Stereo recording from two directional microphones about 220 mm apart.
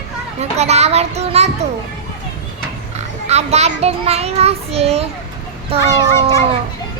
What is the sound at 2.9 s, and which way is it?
A child's voice, 30° right (ahead or behind).